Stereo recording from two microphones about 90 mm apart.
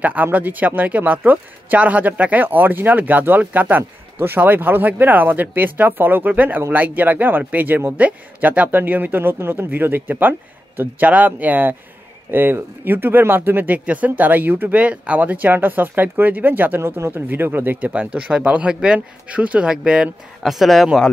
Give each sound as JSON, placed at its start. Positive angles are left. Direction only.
{"t": 0.0, "sound": "speech", "side_deg": -20}